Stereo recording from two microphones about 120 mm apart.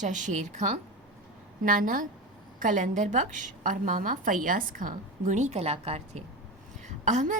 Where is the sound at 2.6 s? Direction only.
90° right; by 6.2 s 55° right (ahead or behind).